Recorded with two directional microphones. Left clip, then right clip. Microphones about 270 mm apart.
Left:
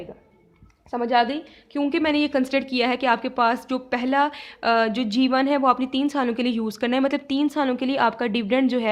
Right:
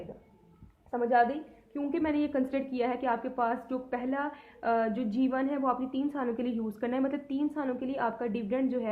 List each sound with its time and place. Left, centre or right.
0.9 s a woman's voice: left